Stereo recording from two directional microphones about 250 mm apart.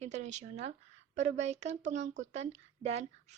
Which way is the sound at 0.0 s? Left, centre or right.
Right.